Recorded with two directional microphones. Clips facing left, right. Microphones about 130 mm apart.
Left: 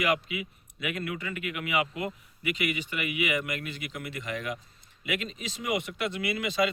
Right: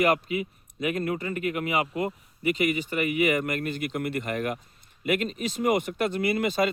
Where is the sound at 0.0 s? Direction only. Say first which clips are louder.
Right 5 dB; 45° right (ahead or behind).